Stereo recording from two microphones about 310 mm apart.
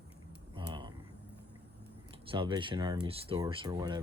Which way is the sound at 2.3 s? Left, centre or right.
Centre.